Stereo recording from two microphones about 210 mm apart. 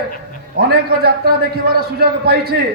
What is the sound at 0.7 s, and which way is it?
A man's voice, 45° right (ahead or behind).